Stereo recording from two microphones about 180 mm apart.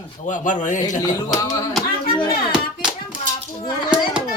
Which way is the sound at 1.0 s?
20° left (ahead or behind).